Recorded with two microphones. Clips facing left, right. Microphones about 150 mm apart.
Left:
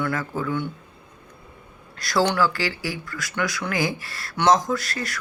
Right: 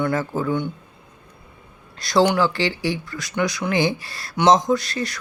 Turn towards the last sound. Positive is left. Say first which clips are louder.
# right 5 dB
turn(degrees=-20)  # may be behind; listen again after turning